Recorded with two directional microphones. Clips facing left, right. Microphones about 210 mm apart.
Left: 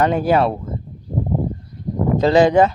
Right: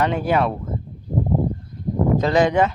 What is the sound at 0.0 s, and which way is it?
Speech, 40° left (ahead or behind).